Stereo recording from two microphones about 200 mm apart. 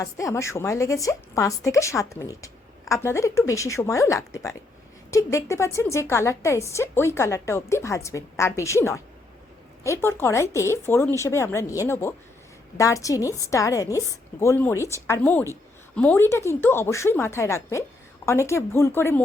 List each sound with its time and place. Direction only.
0.0 s a woman's voice: 15° left (ahead or behind)